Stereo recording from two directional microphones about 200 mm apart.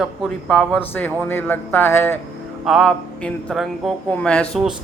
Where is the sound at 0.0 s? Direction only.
5° left (ahead or behind).